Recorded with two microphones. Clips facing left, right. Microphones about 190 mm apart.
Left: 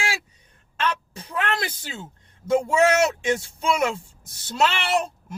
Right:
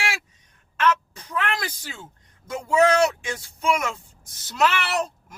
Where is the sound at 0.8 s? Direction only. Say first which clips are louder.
Right 4 dB; 30° left (ahead or behind).